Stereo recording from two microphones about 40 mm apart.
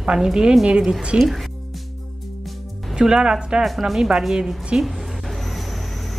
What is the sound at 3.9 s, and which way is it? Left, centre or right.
Speech, right.